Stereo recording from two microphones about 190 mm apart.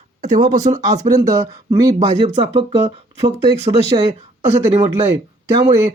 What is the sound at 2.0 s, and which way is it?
Speech, 35° right (ahead or behind).